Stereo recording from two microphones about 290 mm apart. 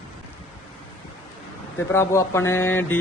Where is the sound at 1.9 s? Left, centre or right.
Centre.